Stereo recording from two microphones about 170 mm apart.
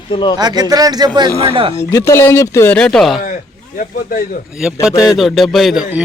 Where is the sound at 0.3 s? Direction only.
25° right (ahead or behind).